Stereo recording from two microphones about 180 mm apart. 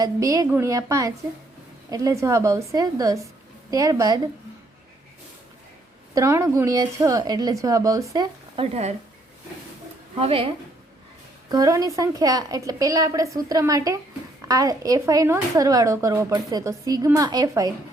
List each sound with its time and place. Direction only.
0.0 s a woman's voice: 20° right (ahead or behind)
6.1 s speech: 15° right (ahead or behind)
8.6 s speech: 35° right (ahead or behind)
10.2 s speech: 30° right (ahead or behind)
11.4 s speech: 20° right (ahead or behind)